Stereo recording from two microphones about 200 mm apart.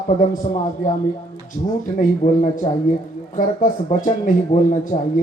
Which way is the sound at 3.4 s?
40° left (ahead or behind).